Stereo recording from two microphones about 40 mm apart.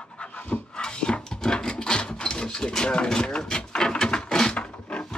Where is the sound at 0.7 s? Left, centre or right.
Left.